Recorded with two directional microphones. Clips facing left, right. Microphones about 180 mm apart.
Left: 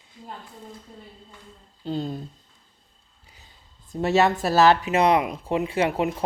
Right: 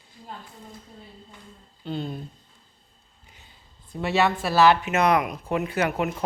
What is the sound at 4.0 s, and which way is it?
A woman's voice, 40° left (ahead or behind).